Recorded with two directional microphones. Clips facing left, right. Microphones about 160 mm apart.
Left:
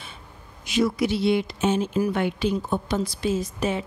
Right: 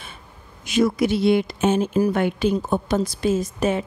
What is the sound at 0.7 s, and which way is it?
Speech, 50° right (ahead or behind).